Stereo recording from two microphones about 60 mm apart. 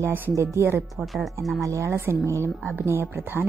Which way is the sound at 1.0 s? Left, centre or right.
Centre.